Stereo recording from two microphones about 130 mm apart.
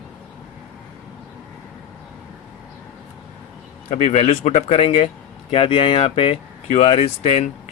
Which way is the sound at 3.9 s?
60° left (ahead or behind).